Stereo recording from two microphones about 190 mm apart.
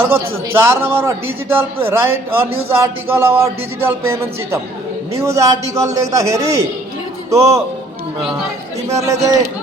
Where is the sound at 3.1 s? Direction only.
15° right (ahead or behind).